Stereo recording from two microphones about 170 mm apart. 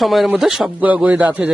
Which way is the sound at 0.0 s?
Centre (ahead or behind).